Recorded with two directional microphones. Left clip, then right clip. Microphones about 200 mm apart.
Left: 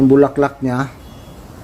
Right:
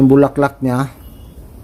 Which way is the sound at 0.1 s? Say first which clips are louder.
Even; 25° right (ahead or behind).